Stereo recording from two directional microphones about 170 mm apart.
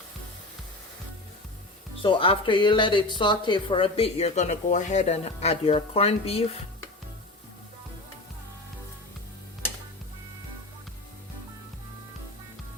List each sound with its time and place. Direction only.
2.0 s speech: 30° left (ahead or behind)